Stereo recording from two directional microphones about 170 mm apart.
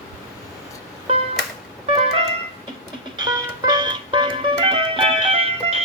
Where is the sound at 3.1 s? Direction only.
25° right (ahead or behind).